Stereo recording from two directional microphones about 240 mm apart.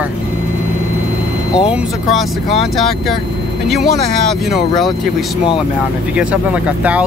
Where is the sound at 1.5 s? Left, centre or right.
Centre.